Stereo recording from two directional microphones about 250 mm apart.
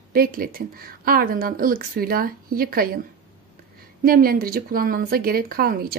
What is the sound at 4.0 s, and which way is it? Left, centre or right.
A woman's voice, right.